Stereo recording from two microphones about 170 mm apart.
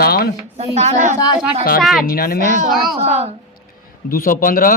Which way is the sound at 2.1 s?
60° left (ahead or behind).